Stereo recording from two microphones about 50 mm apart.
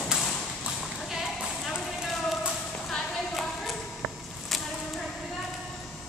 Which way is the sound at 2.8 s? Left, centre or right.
Centre.